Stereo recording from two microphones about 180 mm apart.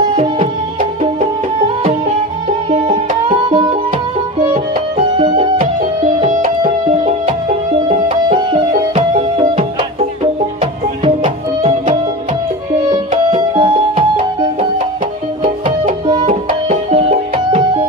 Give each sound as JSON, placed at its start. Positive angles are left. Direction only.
{"t": 0.1, "sound": "music", "side_deg": -30}
{"t": 2.7, "sound": "music", "side_deg": -30}
{"t": 4.9, "sound": "music", "side_deg": -30}
{"t": 11.1, "sound": "music", "side_deg": -35}
{"t": 16.1, "sound": "music", "side_deg": -30}